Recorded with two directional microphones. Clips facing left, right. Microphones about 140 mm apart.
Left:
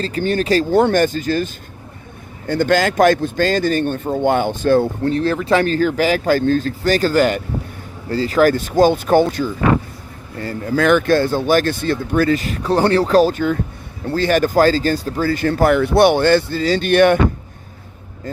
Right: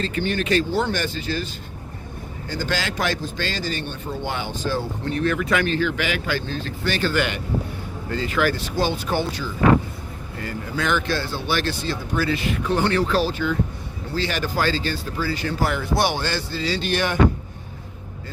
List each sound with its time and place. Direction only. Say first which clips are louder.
0.0 s speech: left 5 dB; 35° left (ahead or behind)
0.7 s speech: left 9 dB; 55° left (ahead or behind)
2.5 s speech: left 11 dB; 55° left (ahead or behind)
5.0 s speech: left 5 dB; 35° left (ahead or behind); by 9.5 s 50° left (ahead or behind)
10.8 s speech: left 10 dB; 55° left (ahead or behind)